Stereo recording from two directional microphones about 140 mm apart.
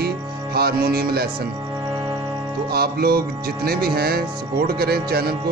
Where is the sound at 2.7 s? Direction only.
90° right.